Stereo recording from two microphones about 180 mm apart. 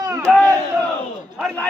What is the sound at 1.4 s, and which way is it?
Speech, 5° left (ahead or behind).